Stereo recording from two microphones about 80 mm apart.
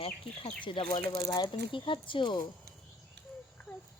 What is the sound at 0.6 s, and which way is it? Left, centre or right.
Speech, left.